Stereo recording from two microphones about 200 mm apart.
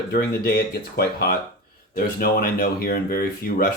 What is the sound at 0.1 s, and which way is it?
Speech, 50° left (ahead or behind).